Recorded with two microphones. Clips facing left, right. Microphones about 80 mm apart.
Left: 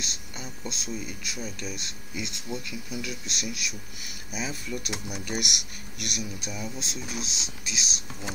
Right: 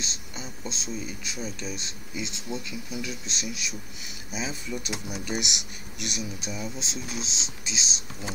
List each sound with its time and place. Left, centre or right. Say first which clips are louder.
0.0 s speech: right 1 dB; centre